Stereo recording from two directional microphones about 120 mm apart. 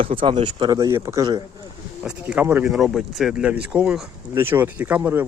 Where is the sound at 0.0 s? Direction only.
50° right (ahead or behind).